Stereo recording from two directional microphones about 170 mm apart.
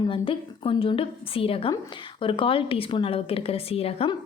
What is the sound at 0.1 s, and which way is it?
Speech, 30° left (ahead or behind).